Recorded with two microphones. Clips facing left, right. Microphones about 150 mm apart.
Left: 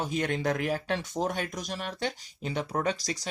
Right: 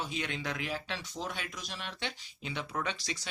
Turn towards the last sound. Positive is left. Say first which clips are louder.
# left 7 dB
turn(degrees=40)  # may be behind; listen again after turning